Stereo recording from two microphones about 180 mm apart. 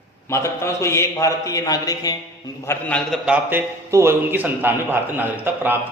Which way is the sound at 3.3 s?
10° right (ahead or behind).